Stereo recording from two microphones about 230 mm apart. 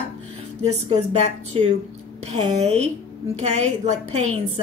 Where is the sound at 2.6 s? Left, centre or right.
Right.